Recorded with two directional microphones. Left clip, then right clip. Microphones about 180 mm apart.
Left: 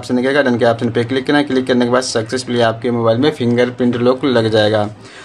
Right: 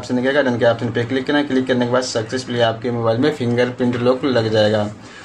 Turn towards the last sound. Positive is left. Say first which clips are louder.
# left 3 dB
turn(degrees=35)  # may be behind; listen again after turning